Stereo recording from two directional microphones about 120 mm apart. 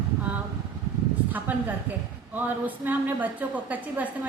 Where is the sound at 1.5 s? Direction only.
15° right (ahead or behind).